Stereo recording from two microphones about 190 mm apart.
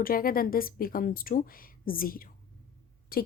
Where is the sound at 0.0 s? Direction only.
50° left (ahead or behind).